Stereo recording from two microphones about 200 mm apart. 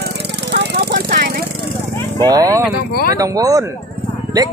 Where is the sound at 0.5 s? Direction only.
55° right (ahead or behind).